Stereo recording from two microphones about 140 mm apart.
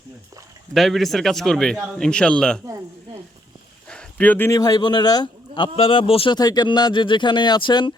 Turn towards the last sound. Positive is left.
turn(degrees=35)  # may be behind; listen again after turning